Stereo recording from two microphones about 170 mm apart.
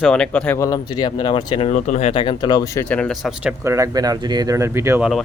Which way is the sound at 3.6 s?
20° right (ahead or behind).